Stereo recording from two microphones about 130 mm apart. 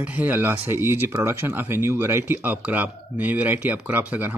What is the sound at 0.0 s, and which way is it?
Speech, 10° right (ahead or behind).